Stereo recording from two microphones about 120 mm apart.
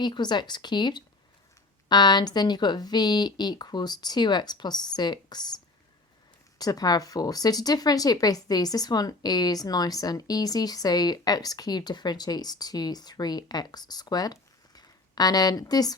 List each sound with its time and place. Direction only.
0.0 s speech: 40° left (ahead or behind)
6.6 s speech: 30° left (ahead or behind)